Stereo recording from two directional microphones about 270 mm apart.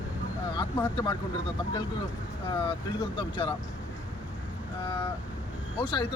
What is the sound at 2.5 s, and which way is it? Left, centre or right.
Speech, centre.